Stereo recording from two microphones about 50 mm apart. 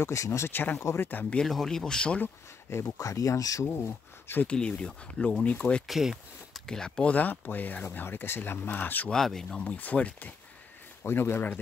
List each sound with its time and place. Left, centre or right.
0.0 s speech: left
0.5 s speech: left
1.4 s speech: centre
1.9 s speech: centre
2.7 s speech: left
4.5 s speech: left
5.9 s speech: centre
6.6 s speech: centre
7.1 s speech: left
9.1 s speech: centre
9.6 s speech: left
11.1 s speech: left